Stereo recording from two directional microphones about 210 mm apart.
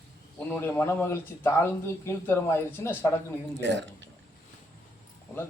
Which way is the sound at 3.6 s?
60° right (ahead or behind).